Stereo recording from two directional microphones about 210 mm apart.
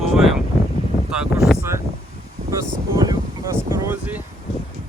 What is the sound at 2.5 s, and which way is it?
Speech, 15° right (ahead or behind).